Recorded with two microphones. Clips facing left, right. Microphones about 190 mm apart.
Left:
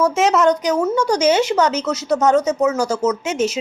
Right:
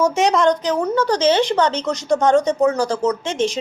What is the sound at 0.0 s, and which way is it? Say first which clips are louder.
A woman's voice: left 1 dB; centre (ahead or behind).